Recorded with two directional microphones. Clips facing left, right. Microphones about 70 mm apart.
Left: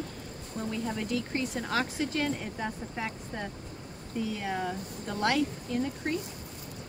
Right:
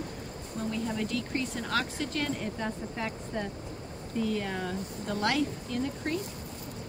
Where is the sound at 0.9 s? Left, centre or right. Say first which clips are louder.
Even; centre.